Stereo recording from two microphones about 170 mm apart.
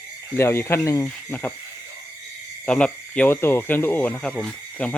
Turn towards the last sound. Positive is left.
turn(degrees=5)  # may be behind; listen again after turning